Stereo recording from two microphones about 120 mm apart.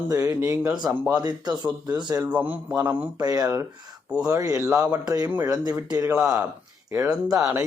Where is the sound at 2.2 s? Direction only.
15° right (ahead or behind).